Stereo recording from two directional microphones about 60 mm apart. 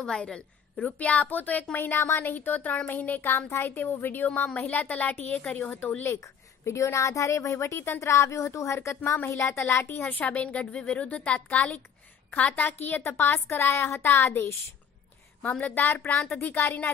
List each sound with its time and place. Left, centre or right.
0.0 s a woman's voice: centre; by 6.0 s left
6.0 s a woman's voice: left
15.4 s a woman's voice: left